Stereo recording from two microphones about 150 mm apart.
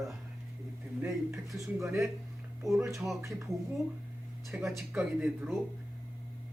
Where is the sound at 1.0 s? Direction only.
15° right (ahead or behind).